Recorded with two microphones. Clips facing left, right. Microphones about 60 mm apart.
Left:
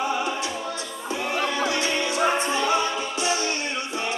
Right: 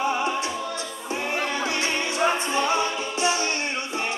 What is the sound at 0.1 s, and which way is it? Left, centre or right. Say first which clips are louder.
Music: right 1 dB; right.